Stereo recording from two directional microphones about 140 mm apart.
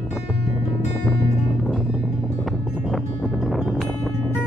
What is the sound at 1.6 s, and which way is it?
Music, centre (ahead or behind).